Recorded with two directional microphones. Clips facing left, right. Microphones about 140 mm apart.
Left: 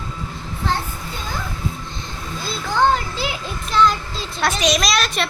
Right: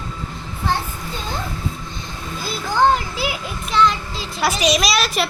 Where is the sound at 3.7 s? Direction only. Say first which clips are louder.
Even; centre (ahead or behind).